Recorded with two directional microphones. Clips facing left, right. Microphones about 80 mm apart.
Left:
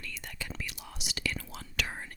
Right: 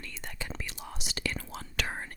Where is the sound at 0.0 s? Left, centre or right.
Right.